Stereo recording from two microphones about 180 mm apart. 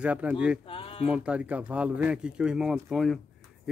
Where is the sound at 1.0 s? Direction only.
5° right (ahead or behind).